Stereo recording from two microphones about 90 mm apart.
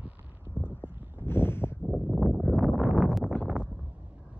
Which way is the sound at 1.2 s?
25° left (ahead or behind).